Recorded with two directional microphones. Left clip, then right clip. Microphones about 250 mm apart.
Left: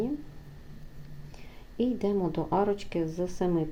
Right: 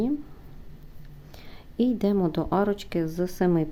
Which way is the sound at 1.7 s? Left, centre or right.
Right.